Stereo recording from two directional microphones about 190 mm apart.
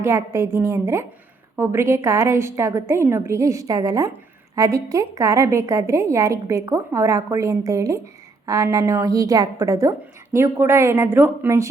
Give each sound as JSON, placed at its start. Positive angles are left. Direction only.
{"t": 0.0, "sound": "a woman's voice", "side_deg": -15}